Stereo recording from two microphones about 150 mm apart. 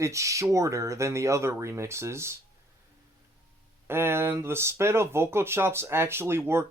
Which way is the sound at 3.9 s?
15° right (ahead or behind).